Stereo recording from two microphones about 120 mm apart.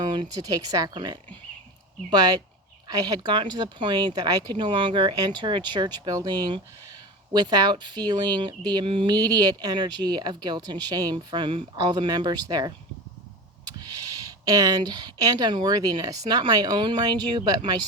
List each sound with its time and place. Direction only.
0.0 s speech: 40° right (ahead or behind)
9.1 s speech: 35° right (ahead or behind)
13.7 s speech: 35° right (ahead or behind)